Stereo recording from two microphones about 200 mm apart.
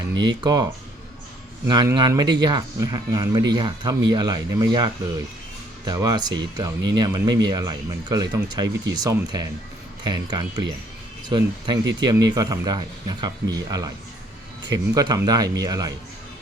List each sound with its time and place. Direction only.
0.1 s speech: 65° right (ahead or behind)
0.4 s speech: 20° right (ahead or behind)